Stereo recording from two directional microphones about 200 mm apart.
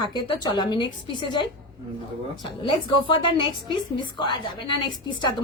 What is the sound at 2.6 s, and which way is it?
A woman's voice, 25° left (ahead or behind).